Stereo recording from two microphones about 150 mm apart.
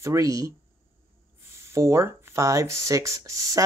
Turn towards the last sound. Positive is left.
turn(degrees=-20)  # may be behind; listen again after turning